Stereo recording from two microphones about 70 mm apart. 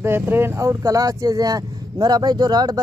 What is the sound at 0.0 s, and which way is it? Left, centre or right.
Speech, right.